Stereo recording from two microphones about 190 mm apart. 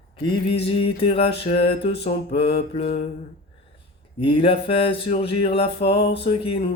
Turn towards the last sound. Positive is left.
turn(degrees=30)  # may be behind; listen again after turning